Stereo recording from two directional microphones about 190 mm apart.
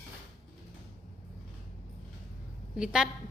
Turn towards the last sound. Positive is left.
turn(degrees=-5)  # may be behind; listen again after turning